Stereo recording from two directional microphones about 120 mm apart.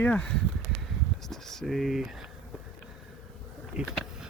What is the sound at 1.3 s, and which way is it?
Speech, 5° left (ahead or behind).